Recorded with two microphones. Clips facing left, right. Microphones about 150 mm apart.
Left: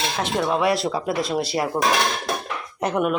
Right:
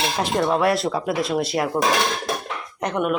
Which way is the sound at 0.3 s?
Centre (ahead or behind).